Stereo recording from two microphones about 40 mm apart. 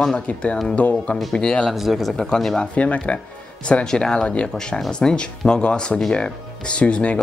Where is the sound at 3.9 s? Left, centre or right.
Centre.